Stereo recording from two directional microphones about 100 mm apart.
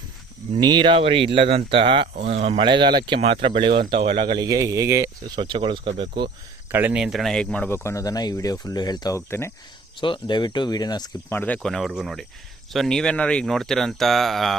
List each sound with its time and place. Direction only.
0.6 s speech: 50° right (ahead or behind); by 2.6 s 80° right
2.6 s speech: 55° right (ahead or behind)
3.2 s speech: 70° right (ahead or behind); by 4.4 s 55° right (ahead or behind)
4.4 s speech: 35° right (ahead or behind)
5.4 s speech: 55° right (ahead or behind)
6.7 s speech: 20° right (ahead or behind)
7.0 s speech: centre (ahead or behind)
7.6 s speech: 25° left (ahead or behind); by 9.1 s 45° left (ahead or behind)
9.1 s speech: 25° left (ahead or behind)
10.0 s speech: 50° left (ahead or behind)
11.3 s speech: 20° left (ahead or behind); by 14.5 s centre (ahead or behind)